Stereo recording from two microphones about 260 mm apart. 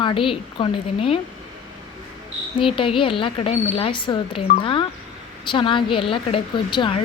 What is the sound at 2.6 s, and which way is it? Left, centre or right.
A woman's voice, centre.